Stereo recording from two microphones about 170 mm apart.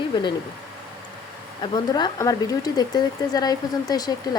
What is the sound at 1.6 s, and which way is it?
Speech, 25° left (ahead or behind).